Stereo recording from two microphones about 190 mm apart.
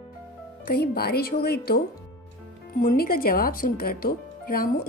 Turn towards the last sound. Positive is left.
turn(degrees=50)  # may be behind; listen again after turning